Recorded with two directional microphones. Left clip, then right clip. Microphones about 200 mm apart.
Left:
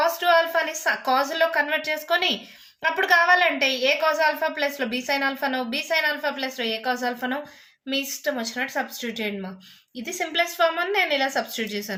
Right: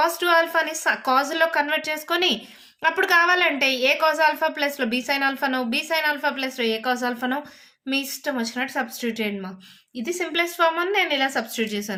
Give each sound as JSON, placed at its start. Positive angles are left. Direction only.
{"t": 0.0, "sound": "a woman's voice", "side_deg": -30}